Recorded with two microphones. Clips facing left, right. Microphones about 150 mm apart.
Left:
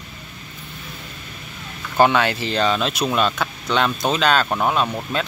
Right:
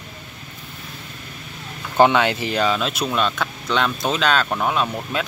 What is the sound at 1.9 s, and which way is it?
Speech, 20° right (ahead or behind).